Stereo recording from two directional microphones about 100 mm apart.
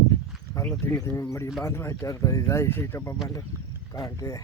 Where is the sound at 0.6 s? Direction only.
30° left (ahead or behind).